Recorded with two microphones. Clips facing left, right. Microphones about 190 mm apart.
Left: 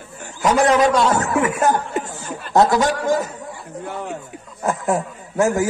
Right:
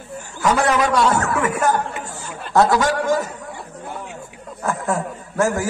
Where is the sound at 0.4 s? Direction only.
20° left (ahead or behind).